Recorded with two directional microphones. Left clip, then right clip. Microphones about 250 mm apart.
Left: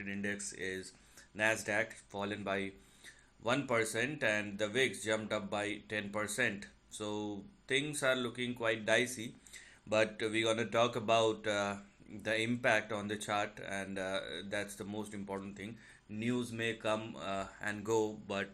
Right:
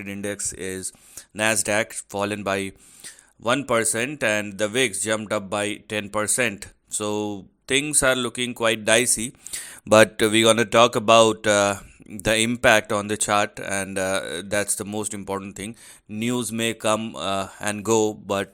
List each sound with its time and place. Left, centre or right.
0.0 s speech: right